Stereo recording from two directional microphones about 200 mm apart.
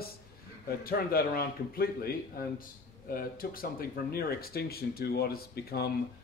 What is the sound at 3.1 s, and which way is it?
Speech, 45° left (ahead or behind).